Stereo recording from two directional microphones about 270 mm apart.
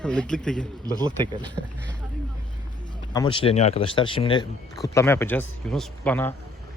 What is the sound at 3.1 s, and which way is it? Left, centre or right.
Speech, centre.